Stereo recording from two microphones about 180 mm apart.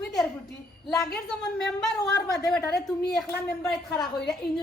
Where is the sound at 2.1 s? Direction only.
20° left (ahead or behind).